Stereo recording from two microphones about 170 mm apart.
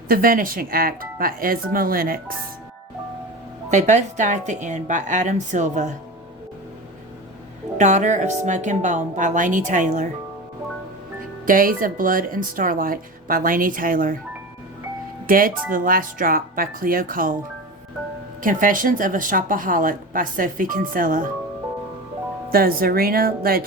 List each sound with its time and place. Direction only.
0.1 s a woman's voice: 55° right (ahead or behind)
3.7 s a woman's voice: 45° right (ahead or behind)
7.8 s a woman's voice: 45° right (ahead or behind)
11.4 s a woman's voice: 55° right (ahead or behind)
15.3 s a woman's voice: 55° right (ahead or behind)
18.4 s a woman's voice: 55° right (ahead or behind)
22.5 s a woman's voice: 60° right (ahead or behind)